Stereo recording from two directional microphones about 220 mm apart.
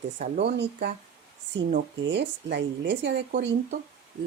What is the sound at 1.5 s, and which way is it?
Speech, 55° right (ahead or behind).